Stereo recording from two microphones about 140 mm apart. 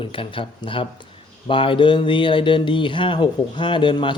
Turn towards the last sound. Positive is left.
turn(degrees=35)  # may be behind; listen again after turning